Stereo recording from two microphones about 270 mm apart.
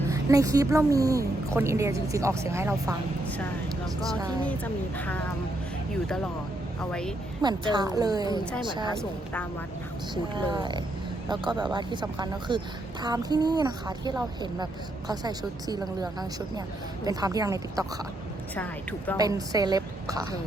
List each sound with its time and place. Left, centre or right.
0.1 s a woman's voice: centre
4.4 s a woman's voice: centre
7.4 s a woman's voice: centre
9.0 s a woman's voice: centre
10.3 s a woman's voice: centre
17.1 s a woman's voice: centre
18.5 s a woman's voice: centre
19.1 s a woman's voice: centre